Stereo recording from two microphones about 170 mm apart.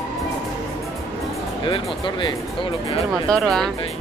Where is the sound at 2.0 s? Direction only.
30° left (ahead or behind).